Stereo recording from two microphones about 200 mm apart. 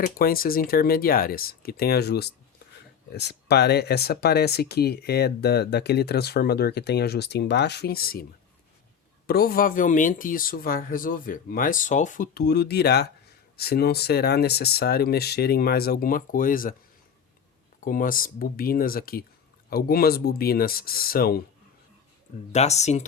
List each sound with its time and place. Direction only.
0.2 s speech: 45° left (ahead or behind)
9.2 s speech: 50° left (ahead or behind)
17.7 s speech: 45° left (ahead or behind)
22.5 s speech: 35° left (ahead or behind)